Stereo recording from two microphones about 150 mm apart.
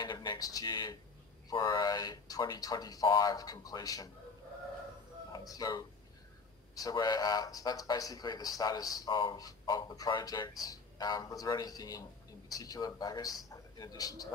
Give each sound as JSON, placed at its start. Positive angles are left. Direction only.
{"t": 0.0, "sound": "a sound", "side_deg": 30}
{"t": 1.5, "sound": "a man's voice", "side_deg": 30}
{"t": 5.3, "sound": "a man's voice", "side_deg": 25}